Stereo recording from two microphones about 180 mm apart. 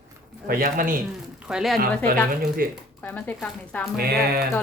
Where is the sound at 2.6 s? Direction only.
55° right (ahead or behind).